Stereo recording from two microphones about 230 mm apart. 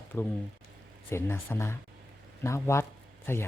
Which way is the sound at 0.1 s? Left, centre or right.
Centre.